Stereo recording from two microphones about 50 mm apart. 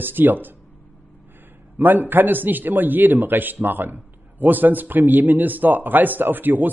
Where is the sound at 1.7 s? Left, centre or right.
Right.